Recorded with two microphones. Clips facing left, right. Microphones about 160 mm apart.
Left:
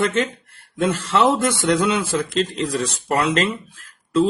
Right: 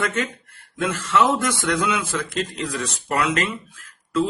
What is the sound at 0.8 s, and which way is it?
Speech, 30° left (ahead or behind).